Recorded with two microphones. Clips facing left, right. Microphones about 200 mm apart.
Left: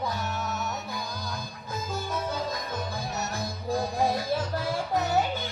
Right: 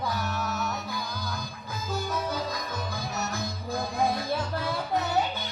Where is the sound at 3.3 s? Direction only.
35° left (ahead or behind).